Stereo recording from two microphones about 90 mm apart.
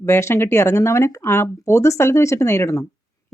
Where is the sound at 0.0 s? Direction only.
30° left (ahead or behind).